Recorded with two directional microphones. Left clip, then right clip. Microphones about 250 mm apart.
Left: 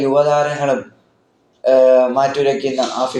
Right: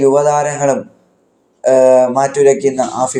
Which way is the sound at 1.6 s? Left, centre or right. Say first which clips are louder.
Right 2 dB; right.